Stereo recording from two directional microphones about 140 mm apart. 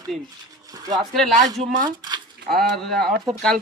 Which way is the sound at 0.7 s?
25° right (ahead or behind).